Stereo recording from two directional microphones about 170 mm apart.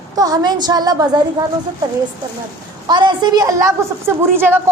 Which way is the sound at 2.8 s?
25° right (ahead or behind).